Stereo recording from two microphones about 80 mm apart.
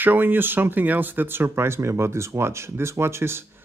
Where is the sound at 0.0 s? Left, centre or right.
Right.